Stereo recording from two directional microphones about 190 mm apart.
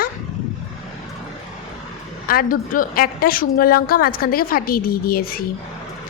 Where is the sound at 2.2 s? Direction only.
50° left (ahead or behind).